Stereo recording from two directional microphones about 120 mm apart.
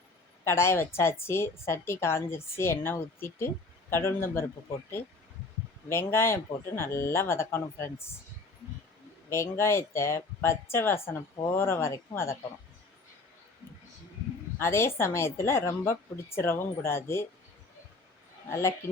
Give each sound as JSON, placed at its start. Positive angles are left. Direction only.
{"t": 0.4, "sound": "a woman's voice", "side_deg": 20}
{"t": 5.9, "sound": "a woman's voice", "side_deg": 20}
{"t": 9.3, "sound": "a woman's voice", "side_deg": 20}
{"t": 14.6, "sound": "a woman's voice", "side_deg": 20}
{"t": 18.4, "sound": "a woman's voice", "side_deg": 20}